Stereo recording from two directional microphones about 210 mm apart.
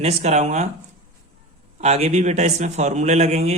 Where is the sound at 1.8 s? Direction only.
30° right (ahead or behind).